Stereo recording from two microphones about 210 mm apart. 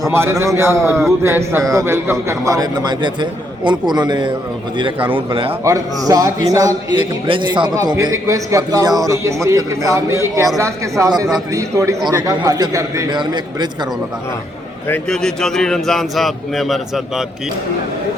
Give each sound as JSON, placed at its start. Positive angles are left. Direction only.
{"t": 0.0, "sound": "a man's voice", "side_deg": -10}
{"t": 14.8, "sound": "a man's voice", "side_deg": 5}